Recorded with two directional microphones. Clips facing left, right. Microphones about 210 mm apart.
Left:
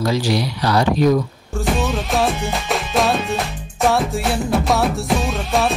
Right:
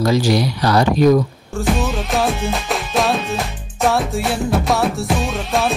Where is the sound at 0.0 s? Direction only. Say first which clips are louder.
Right 3 dB; 45° right (ahead or behind).